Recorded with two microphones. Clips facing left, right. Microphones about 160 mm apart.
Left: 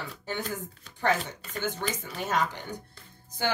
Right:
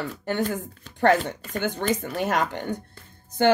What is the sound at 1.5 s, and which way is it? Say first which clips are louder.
Speech: right 6 dB; 60° right (ahead or behind).